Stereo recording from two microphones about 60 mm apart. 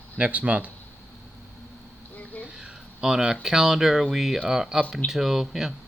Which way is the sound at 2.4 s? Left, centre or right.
Centre.